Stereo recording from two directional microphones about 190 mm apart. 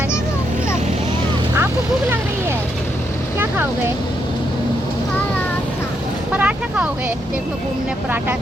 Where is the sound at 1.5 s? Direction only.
10° right (ahead or behind).